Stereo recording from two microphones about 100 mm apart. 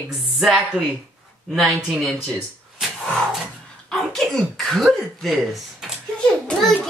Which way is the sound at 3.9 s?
5° left (ahead or behind).